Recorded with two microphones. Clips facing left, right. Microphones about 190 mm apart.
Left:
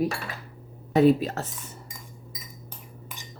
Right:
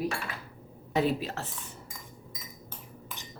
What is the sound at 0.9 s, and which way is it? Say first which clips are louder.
Speech: left 9 dB; 50° left (ahead or behind).